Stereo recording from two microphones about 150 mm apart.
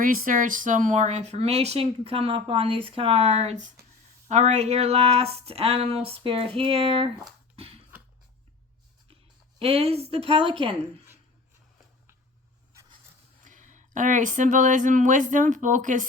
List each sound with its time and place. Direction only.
0.0 s speech: 70° right (ahead or behind); by 7.1 s 40° right (ahead or behind)
7.5 s a sound: 40° right (ahead or behind)
9.6 s speech: 40° right (ahead or behind)
13.4 s speech: 55° right (ahead or behind)